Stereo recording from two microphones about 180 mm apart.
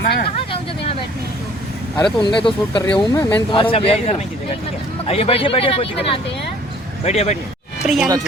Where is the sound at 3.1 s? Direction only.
15° left (ahead or behind).